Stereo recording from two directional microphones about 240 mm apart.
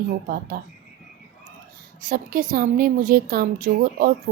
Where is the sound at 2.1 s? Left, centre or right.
Right.